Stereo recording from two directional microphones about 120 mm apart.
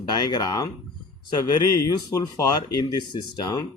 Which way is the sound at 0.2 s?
35° left (ahead or behind).